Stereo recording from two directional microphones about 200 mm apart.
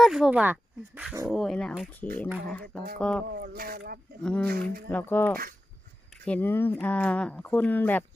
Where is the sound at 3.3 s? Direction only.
50° right (ahead or behind).